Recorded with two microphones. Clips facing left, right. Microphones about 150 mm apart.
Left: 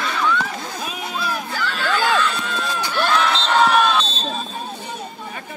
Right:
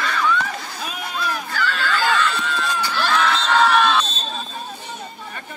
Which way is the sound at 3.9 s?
30° left (ahead or behind).